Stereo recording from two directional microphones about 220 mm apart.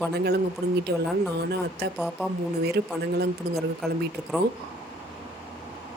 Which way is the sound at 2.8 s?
50° right (ahead or behind).